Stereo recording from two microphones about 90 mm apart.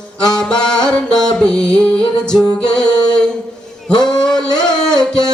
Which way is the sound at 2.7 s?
10° left (ahead or behind).